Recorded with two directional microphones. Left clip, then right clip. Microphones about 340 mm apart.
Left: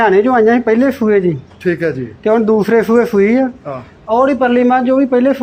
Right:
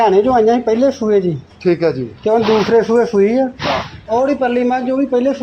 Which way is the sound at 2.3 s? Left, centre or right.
Left.